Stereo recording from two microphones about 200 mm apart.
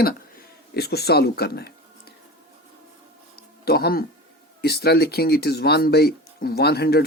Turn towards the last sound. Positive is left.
turn(degrees=50)  # may be behind; listen again after turning